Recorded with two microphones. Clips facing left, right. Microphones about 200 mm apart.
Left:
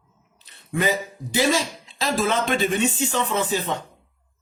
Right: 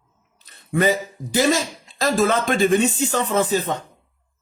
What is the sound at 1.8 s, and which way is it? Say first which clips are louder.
Speech: right 5 dB; 45° right (ahead or behind).